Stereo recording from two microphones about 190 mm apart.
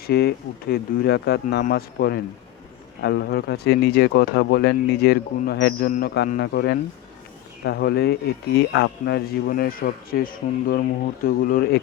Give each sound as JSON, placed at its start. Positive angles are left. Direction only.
{"t": 0.1, "sound": "a man's voice", "side_deg": 55}